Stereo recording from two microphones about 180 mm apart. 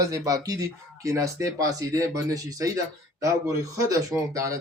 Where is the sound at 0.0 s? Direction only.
20° right (ahead or behind).